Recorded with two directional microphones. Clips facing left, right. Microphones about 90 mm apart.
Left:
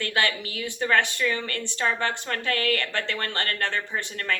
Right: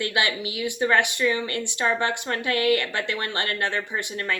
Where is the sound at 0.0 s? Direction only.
15° right (ahead or behind).